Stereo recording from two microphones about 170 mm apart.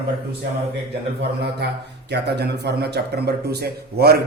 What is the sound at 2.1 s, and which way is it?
A man's voice, 80° right.